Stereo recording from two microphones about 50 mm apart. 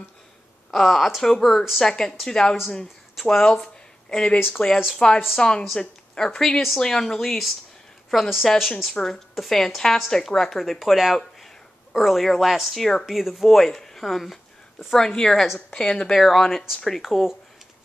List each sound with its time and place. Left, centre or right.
0.7 s speech: centre
1.8 s speech: centre
4.1 s speech: centre
4.4 s speech: left
4.9 s a woman's voice: centre
8.9 s speech: centre
15.0 s speech: centre
15.3 s speech: centre
15.8 s speech: centre
17.0 s speech: centre